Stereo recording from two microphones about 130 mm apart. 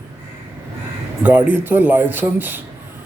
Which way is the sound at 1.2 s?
10° right (ahead or behind).